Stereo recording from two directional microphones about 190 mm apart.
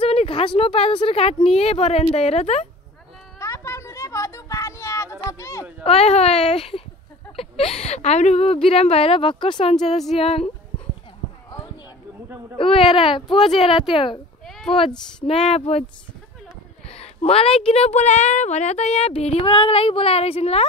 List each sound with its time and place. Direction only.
0.0 s a woman's voice: 30° left (ahead or behind)
3.3 s a sound: 15° left (ahead or behind)
5.4 s speech: 15° left (ahead or behind)
5.9 s a woman's voice: 35° left (ahead or behind)
12.5 s speech: 30° left (ahead or behind)
14.4 s a sound: centre (ahead or behind)
15.2 s a woman's voice: 35° left (ahead or behind)
16.9 s a woman's voice: 35° left (ahead or behind)